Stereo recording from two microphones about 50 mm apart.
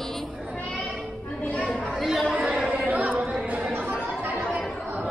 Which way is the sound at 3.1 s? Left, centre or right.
Right.